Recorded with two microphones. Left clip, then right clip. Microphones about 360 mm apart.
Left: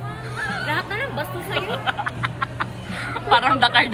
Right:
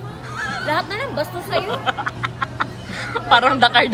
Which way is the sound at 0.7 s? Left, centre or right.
Centre.